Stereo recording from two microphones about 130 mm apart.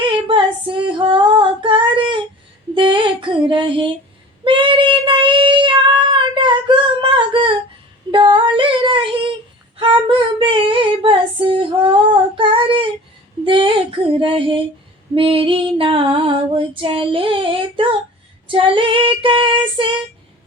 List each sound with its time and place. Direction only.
0.0 s female singing: 40° right (ahead or behind)
2.7 s a sound: 40° right (ahead or behind)
4.4 s child singing: 40° right (ahead or behind)
8.1 s female singing: 40° right (ahead or behind)
12.4 s child singing: 40° right (ahead or behind)
13.4 s female singing: 40° right (ahead or behind)